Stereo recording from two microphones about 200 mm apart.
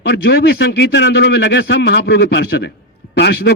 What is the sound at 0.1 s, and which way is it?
A man's voice, 60° left (ahead or behind).